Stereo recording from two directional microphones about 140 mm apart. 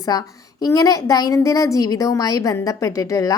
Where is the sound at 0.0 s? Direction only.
25° left (ahead or behind).